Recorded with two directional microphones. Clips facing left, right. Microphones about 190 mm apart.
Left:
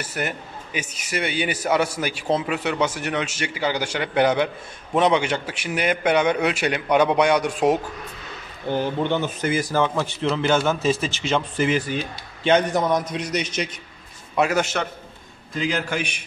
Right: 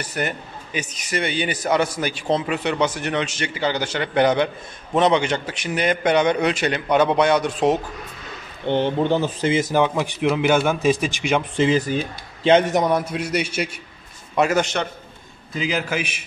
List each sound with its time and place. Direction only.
0.0 s a man's voice: 5° left (ahead or behind)
8.6 s a man's voice: 25° right (ahead or behind)
11.5 s a man's voice: 25° right (ahead or behind)
12.8 s a man's voice: 10° right (ahead or behind)